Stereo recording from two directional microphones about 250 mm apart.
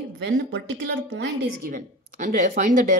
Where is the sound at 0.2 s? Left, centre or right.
Right.